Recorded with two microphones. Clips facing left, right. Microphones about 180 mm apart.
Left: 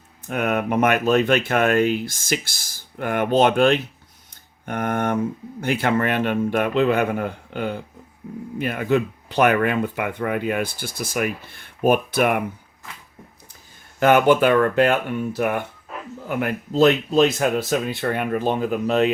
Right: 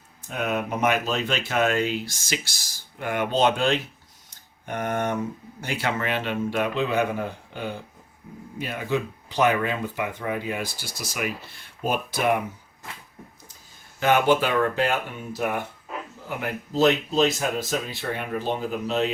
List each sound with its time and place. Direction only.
0.3 s speech: 60° left (ahead or behind)
14.0 s speech: 55° left (ahead or behind)